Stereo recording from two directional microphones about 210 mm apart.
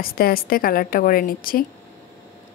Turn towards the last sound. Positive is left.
turn(degrees=45)  # may be behind; listen again after turning